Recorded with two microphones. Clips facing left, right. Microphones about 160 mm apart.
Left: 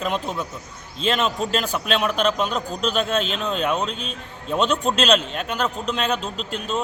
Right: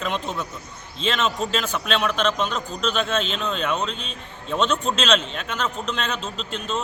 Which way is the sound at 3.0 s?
10° left (ahead or behind).